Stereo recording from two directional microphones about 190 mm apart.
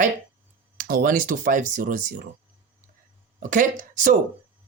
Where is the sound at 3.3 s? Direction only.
45° right (ahead or behind).